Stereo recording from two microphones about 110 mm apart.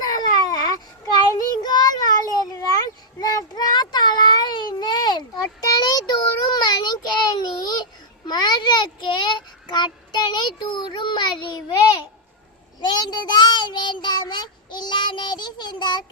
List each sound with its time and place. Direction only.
0.0 s child singing: 35° left (ahead or behind)
12.8 s child singing: 40° left (ahead or behind)